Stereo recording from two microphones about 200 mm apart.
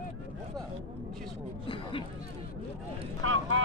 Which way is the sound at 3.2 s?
85° right.